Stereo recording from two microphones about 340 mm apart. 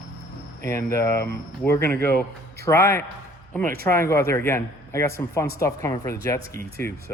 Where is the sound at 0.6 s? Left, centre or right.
Centre.